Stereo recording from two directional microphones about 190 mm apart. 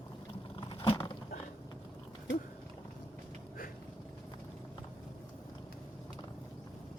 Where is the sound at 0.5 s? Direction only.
25° left (ahead or behind).